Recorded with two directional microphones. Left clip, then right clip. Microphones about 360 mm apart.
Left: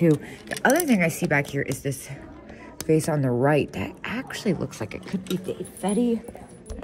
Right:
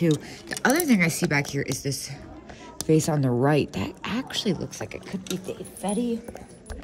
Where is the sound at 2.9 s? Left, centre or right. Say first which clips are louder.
Even; centre.